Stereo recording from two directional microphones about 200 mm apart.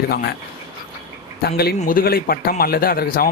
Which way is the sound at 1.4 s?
50° left (ahead or behind).